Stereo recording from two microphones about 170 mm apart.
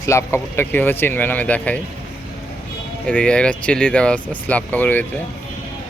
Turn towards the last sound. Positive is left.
turn(degrees=10)  # may be behind; listen again after turning